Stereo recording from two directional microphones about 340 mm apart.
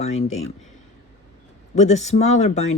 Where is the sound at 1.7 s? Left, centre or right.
Centre.